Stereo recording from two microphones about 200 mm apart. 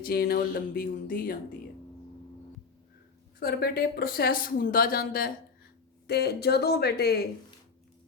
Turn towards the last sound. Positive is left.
turn(degrees=55)  # may be behind; listen again after turning